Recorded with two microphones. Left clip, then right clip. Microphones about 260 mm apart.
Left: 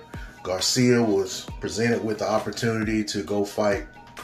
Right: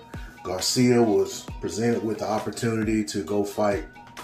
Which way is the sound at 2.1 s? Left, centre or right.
Centre.